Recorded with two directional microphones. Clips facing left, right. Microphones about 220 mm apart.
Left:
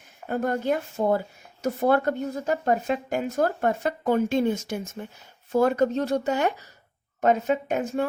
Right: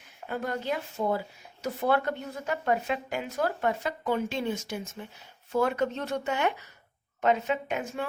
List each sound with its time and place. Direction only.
0.3 s a woman's voice: 45° left (ahead or behind)